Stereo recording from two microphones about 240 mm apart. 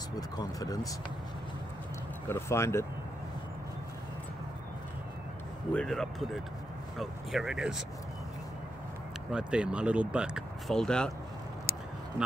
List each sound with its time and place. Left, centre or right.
0.1 s speech: centre
2.2 s speech: centre
5.7 s speech: centre
9.3 s speech: centre